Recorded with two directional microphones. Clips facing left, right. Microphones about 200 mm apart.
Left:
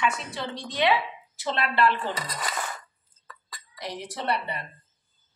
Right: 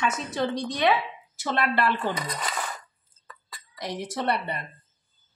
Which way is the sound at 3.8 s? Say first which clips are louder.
Right 4 dB; 45° right (ahead or behind).